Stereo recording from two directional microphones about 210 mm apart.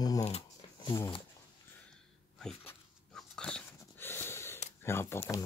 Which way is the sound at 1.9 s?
5° left (ahead or behind).